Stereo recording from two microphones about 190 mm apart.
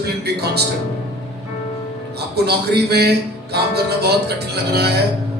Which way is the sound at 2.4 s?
60° right (ahead or behind).